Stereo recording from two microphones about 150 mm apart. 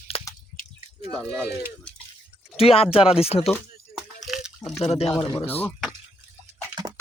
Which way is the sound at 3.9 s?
Centre (ahead or behind).